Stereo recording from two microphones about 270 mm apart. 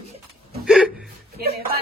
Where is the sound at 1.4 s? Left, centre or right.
Right.